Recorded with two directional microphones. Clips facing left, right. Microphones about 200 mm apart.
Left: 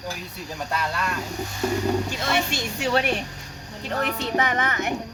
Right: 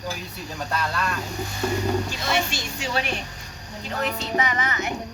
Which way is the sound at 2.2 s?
60° left (ahead or behind).